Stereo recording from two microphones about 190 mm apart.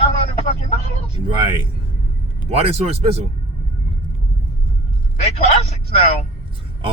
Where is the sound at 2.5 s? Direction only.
30° right (ahead or behind).